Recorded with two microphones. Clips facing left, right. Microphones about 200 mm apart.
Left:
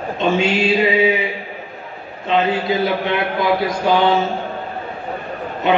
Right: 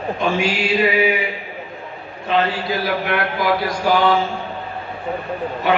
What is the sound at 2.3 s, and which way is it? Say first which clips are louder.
A man's voice: left 3 dB; 20° left (ahead or behind).